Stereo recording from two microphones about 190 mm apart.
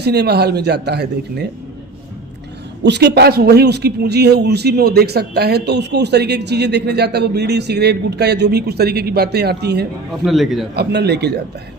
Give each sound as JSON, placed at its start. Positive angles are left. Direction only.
{"t": 0.0, "sound": "a man's voice", "side_deg": -60}
{"t": 2.8, "sound": "a man's voice", "side_deg": -60}
{"t": 10.1, "sound": "a man's voice", "side_deg": 0}
{"t": 10.8, "sound": "a man's voice", "side_deg": -60}